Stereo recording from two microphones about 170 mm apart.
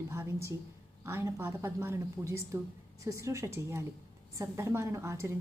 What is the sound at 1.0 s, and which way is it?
A woman's voice, 15° right (ahead or behind).